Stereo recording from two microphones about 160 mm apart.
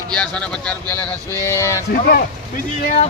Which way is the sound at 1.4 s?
15° left (ahead or behind).